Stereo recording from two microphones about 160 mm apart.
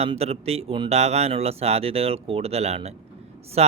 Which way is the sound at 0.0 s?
40° right (ahead or behind).